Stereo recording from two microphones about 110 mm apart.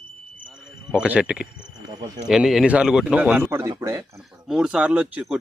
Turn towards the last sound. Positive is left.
turn(degrees=-10)  # may be behind; listen again after turning